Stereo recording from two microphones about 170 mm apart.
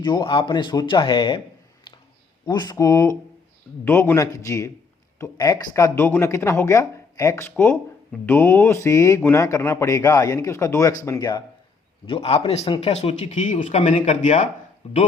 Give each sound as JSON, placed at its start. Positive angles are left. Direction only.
{"t": 0.0, "sound": "speech", "side_deg": 25}
{"t": 2.5, "sound": "speech", "side_deg": 25}